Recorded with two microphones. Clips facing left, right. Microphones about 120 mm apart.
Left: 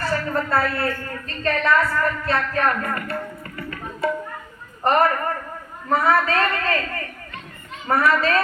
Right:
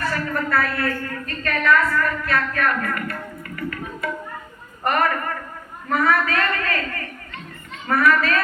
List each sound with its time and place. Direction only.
0.0 s a woman's voice: 30° left (ahead or behind)
4.0 s music: 30° left (ahead or behind)
4.8 s a woman's voice: 30° left (ahead or behind)